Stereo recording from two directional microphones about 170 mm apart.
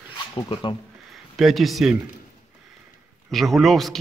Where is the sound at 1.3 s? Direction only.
Centre (ahead or behind).